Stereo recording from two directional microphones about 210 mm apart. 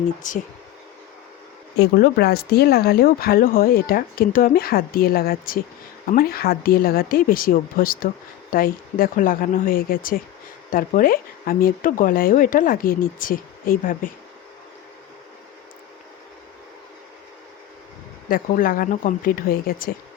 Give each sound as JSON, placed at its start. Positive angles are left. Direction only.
{"t": 0.2, "sound": "speech", "side_deg": 35}
{"t": 1.8, "sound": "speech", "side_deg": 50}
{"t": 18.3, "sound": "speech", "side_deg": 40}